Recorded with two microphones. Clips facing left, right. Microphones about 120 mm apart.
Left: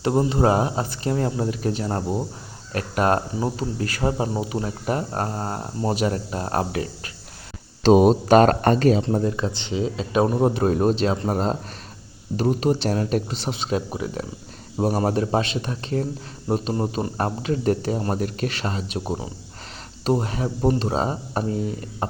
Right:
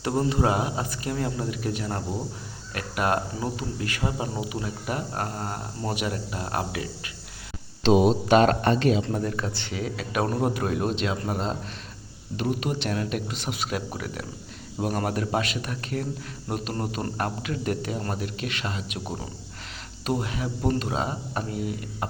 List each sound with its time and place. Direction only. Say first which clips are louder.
0.0 s speech: left 4 dB; 25° left (ahead or behind); by 9.0 s 45° left (ahead or behind)
9.0 s speech: left 5 dB; 25° left (ahead or behind)
17.2 s speech: left 5 dB; 30° left (ahead or behind)